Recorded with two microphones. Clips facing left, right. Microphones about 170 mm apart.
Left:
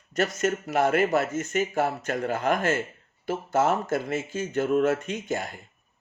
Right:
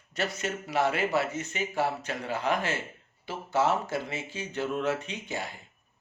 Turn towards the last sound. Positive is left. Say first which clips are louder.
# left 6 dB
turn(degrees=50)  # may be behind; listen again after turning